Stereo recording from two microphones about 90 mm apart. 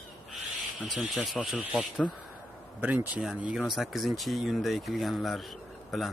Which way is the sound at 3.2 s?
5° right (ahead or behind).